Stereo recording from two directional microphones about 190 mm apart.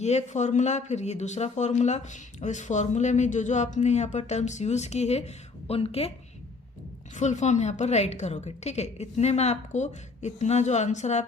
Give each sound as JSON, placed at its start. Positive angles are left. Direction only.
{"t": 0.0, "sound": "speech", "side_deg": 35}
{"t": 7.2, "sound": "speech", "side_deg": 40}